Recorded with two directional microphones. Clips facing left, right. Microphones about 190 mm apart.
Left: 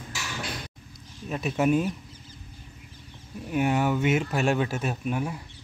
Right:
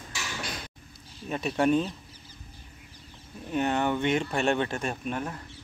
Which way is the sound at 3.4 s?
10° left (ahead or behind).